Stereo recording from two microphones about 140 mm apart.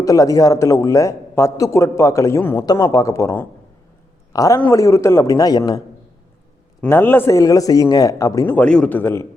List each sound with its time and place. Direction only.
0.0 s a man's voice: 25° left (ahead or behind)
6.8 s a man's voice: 15° left (ahead or behind)